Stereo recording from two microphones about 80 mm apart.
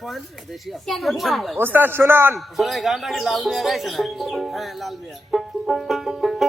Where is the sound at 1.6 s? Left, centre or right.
Right.